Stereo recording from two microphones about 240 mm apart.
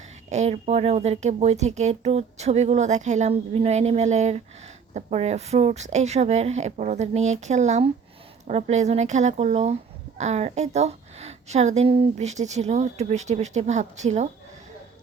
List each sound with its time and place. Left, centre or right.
0.3 s speech: right